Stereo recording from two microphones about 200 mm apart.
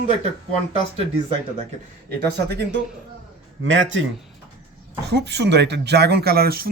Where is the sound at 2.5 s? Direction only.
55° right (ahead or behind).